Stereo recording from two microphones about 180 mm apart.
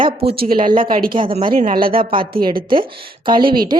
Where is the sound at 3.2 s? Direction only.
25° right (ahead or behind).